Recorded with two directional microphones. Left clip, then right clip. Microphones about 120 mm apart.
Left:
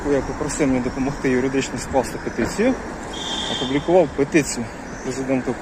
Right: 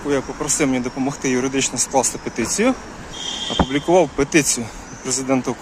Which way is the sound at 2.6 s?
75° right (ahead or behind).